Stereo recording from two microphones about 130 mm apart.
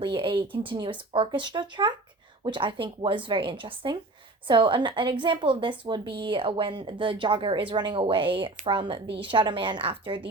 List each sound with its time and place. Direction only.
0.0 s speech: 40° right (ahead or behind)